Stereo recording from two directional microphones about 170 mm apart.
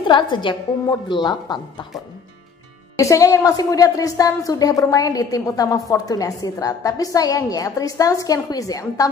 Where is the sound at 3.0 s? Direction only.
20° left (ahead or behind).